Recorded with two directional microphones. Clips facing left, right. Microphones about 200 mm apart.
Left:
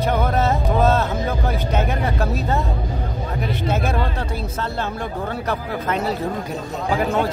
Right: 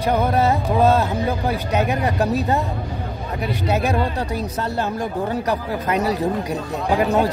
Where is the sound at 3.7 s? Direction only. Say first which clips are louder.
Right 3 dB; 15° right (ahead or behind).